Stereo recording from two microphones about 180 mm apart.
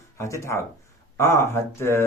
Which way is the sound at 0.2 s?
15° left (ahead or behind).